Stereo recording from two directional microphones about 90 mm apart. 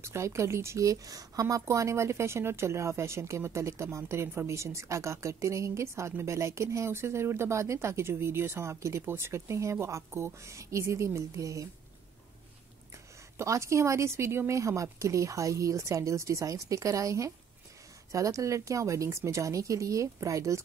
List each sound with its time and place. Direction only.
0.0 s speech: 30° right (ahead or behind)
13.4 s speech: 35° right (ahead or behind)